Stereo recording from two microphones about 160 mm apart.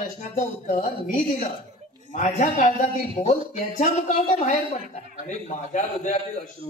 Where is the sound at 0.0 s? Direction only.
50° left (ahead or behind).